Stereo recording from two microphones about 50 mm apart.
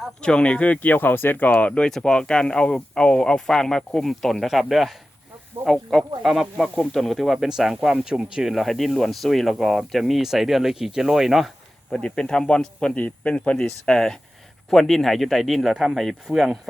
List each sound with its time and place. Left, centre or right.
0.2 s speech: left
1.5 s speech: left
1.9 s speech: centre
7.3 s speech: centre
8.5 s speech: centre
11.9 s speech: centre
14.7 s speech: centre